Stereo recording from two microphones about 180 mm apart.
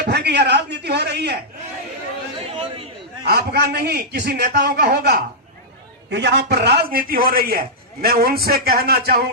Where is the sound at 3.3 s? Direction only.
65° right (ahead or behind).